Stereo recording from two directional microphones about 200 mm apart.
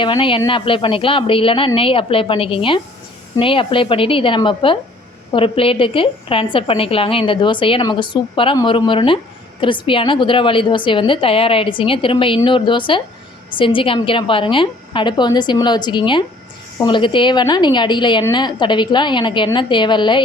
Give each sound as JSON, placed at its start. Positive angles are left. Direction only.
{"t": 0.0, "sound": "a woman's voice", "side_deg": 25}